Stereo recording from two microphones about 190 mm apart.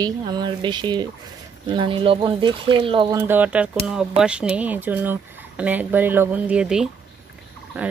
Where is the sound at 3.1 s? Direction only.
10° right (ahead or behind).